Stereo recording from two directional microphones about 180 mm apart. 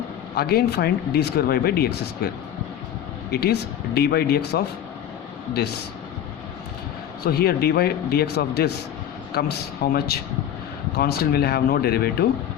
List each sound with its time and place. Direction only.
0.3 s speech: 60° left (ahead or behind)
3.3 s speech: 60° left (ahead or behind)
7.3 s speech: 60° left (ahead or behind)